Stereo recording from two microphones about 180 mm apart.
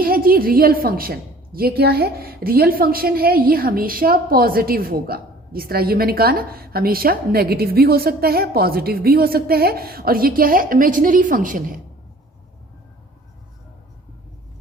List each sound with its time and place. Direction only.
0.0 s a woman's voice: 55° right (ahead or behind)